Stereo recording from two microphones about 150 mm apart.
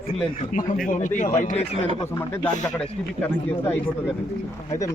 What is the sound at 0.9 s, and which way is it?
Speech, 60° left (ahead or behind).